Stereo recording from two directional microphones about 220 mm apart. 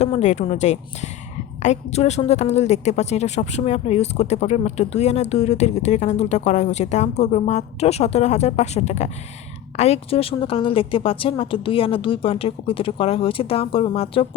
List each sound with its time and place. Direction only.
0.0 s a woman's voice: 30° left (ahead or behind)